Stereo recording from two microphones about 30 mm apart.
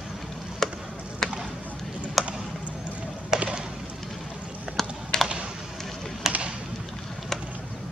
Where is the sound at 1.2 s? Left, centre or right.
Centre.